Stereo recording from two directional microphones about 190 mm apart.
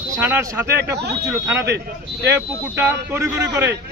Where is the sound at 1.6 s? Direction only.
60° right (ahead or behind).